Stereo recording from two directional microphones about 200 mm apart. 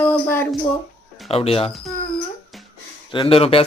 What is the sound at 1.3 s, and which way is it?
Speech, 30° left (ahead or behind).